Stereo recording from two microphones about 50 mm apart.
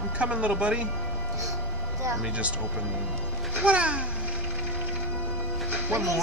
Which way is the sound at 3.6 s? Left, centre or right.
Right.